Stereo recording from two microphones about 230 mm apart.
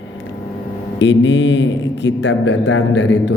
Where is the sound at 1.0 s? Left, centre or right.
Left.